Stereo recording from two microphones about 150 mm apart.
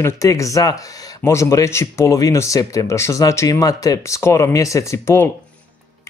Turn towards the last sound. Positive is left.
turn(degrees=20)  # may be behind; listen again after turning